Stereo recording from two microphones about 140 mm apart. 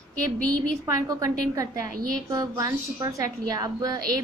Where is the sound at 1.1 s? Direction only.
25° right (ahead or behind).